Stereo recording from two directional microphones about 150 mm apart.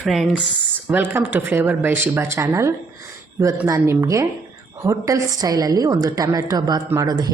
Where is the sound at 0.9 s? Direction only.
15° right (ahead or behind).